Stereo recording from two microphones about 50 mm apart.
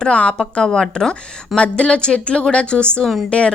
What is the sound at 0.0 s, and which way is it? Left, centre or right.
A woman's voice, centre.